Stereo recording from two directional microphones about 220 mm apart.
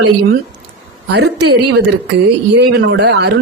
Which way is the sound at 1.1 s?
50° right (ahead or behind).